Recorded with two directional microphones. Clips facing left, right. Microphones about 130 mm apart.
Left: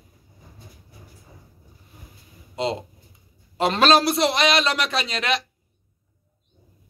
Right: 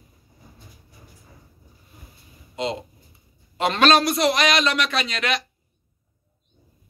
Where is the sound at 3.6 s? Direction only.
30° left (ahead or behind).